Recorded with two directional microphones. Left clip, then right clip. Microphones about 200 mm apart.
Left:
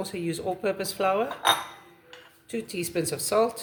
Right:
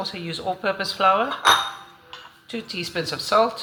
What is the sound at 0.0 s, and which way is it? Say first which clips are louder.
Speech: right 3 dB; 55° left (ahead or behind).